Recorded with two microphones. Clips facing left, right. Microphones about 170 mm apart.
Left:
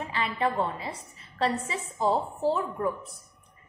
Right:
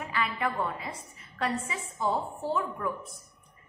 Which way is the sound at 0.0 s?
30° left (ahead or behind).